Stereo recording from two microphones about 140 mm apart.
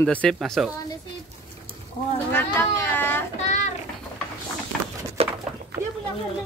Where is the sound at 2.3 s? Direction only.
15° left (ahead or behind).